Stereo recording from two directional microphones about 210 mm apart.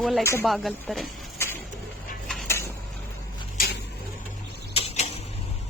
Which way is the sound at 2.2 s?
5° left (ahead or behind).